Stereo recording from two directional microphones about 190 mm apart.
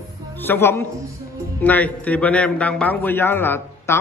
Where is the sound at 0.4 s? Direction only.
10° left (ahead or behind).